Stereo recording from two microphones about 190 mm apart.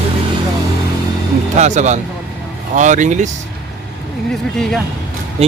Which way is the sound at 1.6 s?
40° right (ahead or behind).